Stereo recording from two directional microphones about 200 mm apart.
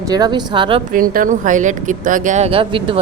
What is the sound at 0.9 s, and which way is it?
A woman's voice, 45° right (ahead or behind).